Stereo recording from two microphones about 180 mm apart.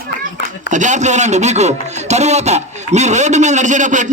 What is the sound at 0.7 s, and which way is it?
Speech, 45° right (ahead or behind).